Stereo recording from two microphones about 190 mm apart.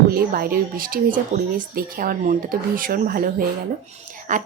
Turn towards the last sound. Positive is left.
turn(degrees=-40)  # may be behind; listen again after turning